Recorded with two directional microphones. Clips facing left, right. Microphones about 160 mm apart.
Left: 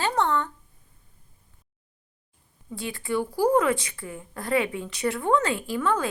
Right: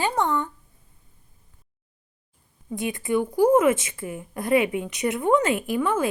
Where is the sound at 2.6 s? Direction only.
20° right (ahead or behind).